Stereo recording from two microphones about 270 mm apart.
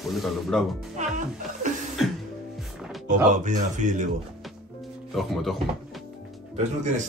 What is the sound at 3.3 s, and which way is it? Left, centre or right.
Speech, right.